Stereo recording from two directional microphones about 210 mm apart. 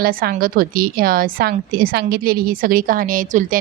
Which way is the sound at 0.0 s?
45° right (ahead or behind).